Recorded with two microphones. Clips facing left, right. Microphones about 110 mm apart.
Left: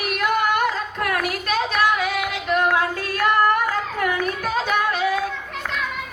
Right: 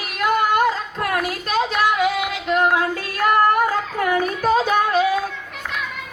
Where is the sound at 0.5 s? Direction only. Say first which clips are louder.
Right 3 dB; 25° right (ahead or behind).